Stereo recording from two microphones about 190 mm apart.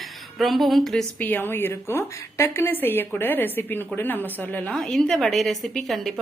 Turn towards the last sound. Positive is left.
turn(degrees=0)  # may be behind; listen again after turning